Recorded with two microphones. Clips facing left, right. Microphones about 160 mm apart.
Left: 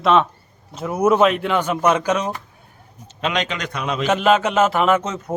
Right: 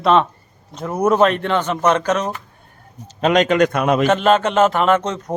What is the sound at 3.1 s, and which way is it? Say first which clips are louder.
Speech: right 8 dB; 45° right (ahead or behind).